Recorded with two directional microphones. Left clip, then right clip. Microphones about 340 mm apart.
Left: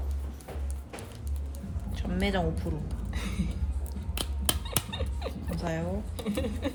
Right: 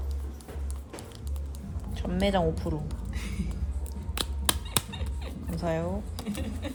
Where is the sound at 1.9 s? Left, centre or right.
Right.